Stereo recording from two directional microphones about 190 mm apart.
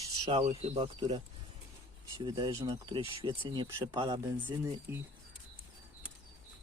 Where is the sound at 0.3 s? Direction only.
30° right (ahead or behind).